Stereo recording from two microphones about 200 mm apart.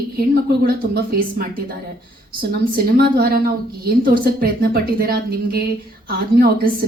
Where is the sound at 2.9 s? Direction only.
50° right (ahead or behind).